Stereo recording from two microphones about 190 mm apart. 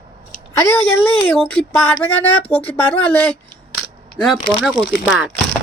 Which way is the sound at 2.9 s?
10° left (ahead or behind).